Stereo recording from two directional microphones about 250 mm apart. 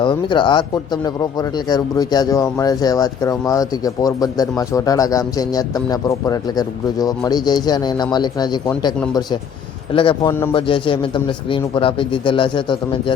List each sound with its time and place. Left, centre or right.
0.0 s speech: centre
9.9 s a man's voice: left